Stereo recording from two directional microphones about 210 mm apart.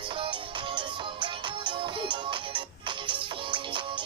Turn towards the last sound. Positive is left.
turn(degrees=-25)  # may be behind; listen again after turning